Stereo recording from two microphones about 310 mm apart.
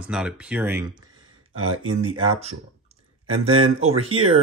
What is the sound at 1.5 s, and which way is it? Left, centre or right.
Speech, right.